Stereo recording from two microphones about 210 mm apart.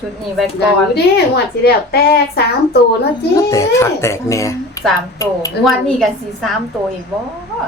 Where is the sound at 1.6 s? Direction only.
50° left (ahead or behind).